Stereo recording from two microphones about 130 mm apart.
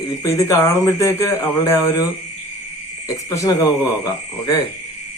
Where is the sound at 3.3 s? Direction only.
25° left (ahead or behind).